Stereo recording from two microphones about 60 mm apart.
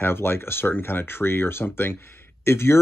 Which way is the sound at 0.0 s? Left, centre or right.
Left.